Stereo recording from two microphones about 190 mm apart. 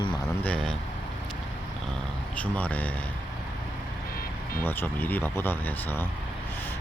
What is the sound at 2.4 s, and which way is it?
Speech, 10° left (ahead or behind).